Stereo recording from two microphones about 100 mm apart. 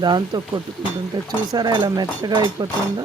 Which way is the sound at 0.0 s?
45° right (ahead or behind).